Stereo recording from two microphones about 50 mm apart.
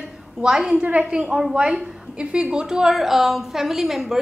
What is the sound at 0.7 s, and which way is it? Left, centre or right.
Speech, right.